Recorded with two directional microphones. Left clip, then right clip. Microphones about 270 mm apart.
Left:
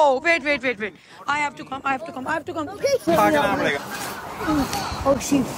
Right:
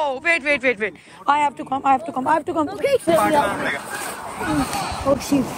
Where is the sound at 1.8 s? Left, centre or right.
Right.